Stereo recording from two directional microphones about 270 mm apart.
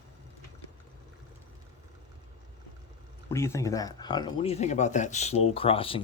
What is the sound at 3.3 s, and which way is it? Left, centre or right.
Speech, centre.